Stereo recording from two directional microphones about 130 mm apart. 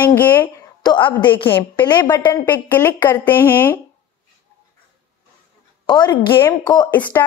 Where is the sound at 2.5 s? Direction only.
15° left (ahead or behind).